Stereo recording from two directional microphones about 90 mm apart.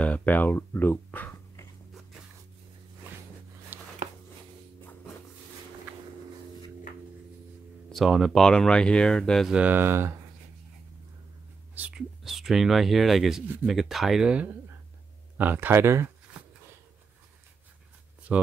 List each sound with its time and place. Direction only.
0.0 s speech: 15° left (ahead or behind)
3.7 s a sound: 20° right (ahead or behind)
7.9 s speech: centre (ahead or behind)
9.5 s speech: 15° right (ahead or behind)
12.2 s speech: 5° right (ahead or behind); by 16.1 s 30° right (ahead or behind)
18.3 s speech: 15° right (ahead or behind)